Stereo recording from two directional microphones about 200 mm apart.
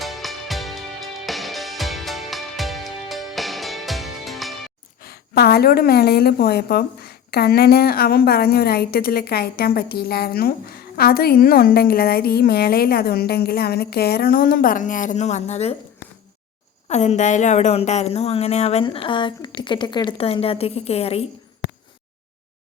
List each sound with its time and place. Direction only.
0.0 s music: centre (ahead or behind)
5.0 s a woman's voice: 50° left (ahead or behind); by 15.7 s 35° left (ahead or behind)
16.9 s speech: 35° left (ahead or behind)